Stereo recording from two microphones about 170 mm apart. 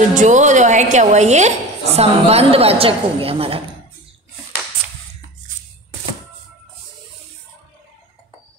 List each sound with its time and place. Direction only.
0.1 s a woman's voice: 45° right (ahead or behind)